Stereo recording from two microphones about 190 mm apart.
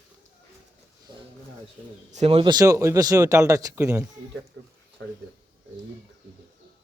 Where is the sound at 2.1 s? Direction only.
35° right (ahead or behind); by 4.0 s 15° right (ahead or behind).